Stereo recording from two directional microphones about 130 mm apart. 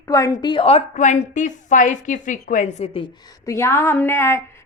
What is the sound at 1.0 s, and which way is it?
A woman's voice, 70° left (ahead or behind).